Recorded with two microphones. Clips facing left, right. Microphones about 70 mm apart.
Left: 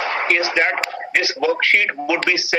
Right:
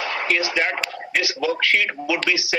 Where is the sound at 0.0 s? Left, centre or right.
Left.